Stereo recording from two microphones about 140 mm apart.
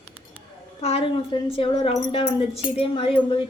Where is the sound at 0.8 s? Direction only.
45° left (ahead or behind).